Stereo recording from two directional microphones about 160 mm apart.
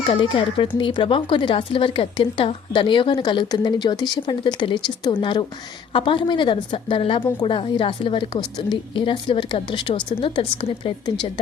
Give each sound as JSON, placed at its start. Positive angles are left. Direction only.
{"t": 0.1, "sound": "speech", "side_deg": 30}